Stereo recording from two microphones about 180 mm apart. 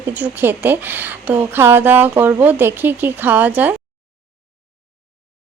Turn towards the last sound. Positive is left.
turn(degrees=-10)  # may be behind; listen again after turning